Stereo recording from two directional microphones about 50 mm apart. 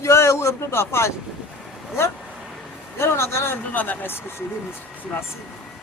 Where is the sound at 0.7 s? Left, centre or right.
Left.